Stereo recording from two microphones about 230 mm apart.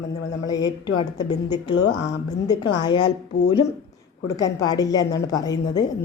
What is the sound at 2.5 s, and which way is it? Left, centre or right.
Speech, centre.